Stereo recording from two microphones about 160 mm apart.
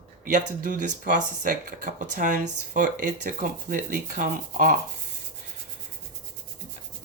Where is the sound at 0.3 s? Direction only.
55° right (ahead or behind).